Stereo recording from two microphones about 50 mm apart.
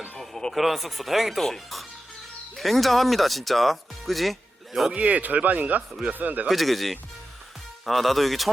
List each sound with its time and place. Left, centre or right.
0.2 s music: centre
0.5 s speech: centre
4.9 s speech: right
6.5 s speech: centre